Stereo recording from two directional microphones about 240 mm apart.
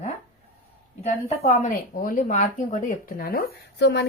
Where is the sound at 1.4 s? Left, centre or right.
Left.